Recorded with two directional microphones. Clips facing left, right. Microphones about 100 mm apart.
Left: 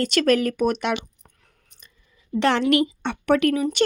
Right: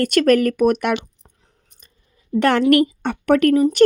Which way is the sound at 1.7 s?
45° right (ahead or behind).